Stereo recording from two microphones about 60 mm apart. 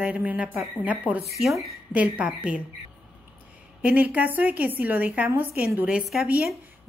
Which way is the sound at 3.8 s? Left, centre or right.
Right.